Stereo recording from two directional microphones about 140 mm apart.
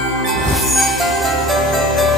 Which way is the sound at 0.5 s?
Centre (ahead or behind).